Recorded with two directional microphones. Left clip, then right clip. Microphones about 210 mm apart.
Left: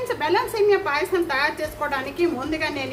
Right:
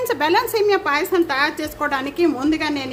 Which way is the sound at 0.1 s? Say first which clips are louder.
Right 4 dB; 55° right (ahead or behind).